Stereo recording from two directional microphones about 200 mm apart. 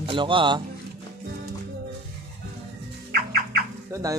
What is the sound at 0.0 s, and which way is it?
Speech, 25° right (ahead or behind).